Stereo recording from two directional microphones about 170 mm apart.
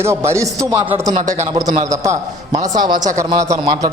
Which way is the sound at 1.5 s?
25° right (ahead or behind).